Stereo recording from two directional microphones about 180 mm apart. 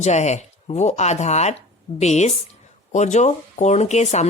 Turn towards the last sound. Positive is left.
turn(degrees=40)  # may be behind; listen again after turning